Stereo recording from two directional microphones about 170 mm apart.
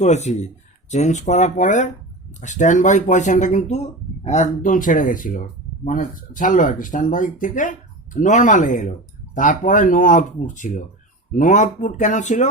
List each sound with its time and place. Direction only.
0.0 s speech: 40° left (ahead or behind)